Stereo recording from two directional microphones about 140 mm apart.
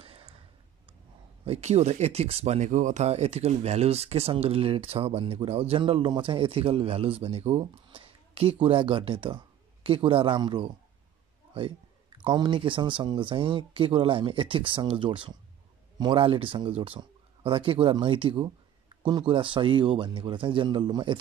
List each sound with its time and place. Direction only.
0.0 s a sound: 40° right (ahead or behind)
1.4 s speech: 50° right (ahead or behind)
12.2 s speech: 35° right (ahead or behind)